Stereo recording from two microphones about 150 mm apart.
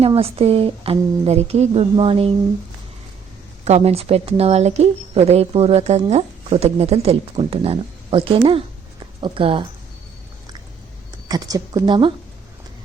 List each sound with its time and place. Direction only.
0.1 s speech: 40° right (ahead or behind)
3.6 s speech: 45° right (ahead or behind)
11.3 s a woman's voice: 25° right (ahead or behind)